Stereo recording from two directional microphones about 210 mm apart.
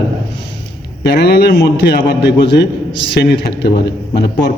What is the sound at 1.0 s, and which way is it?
A man's voice, 50° left (ahead or behind).